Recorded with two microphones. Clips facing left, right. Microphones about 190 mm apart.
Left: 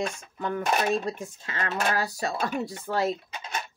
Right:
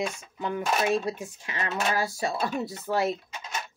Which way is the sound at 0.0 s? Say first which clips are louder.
Even; 15° right (ahead or behind).